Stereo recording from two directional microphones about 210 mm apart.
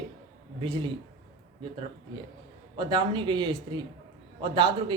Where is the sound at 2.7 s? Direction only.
20° right (ahead or behind).